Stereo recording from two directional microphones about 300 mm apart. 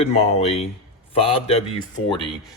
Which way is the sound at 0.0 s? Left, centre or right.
Left.